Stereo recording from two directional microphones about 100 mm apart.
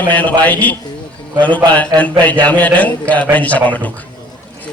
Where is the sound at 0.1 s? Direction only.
15° left (ahead or behind).